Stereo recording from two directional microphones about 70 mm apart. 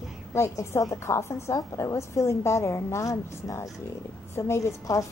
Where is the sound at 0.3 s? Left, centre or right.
Left.